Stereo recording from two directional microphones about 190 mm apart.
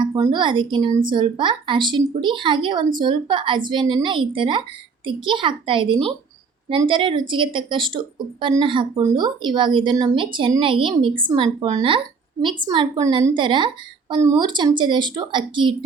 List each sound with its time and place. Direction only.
0.0 s speech: 20° right (ahead or behind)